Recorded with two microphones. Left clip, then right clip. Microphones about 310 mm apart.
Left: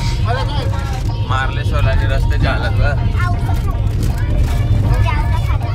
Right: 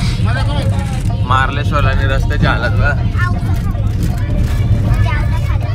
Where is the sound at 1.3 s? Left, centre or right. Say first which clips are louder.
Right 6 dB; centre.